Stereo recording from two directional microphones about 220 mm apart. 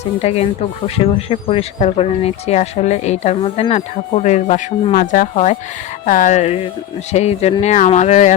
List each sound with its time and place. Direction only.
0.2 s speech: 30° left (ahead or behind)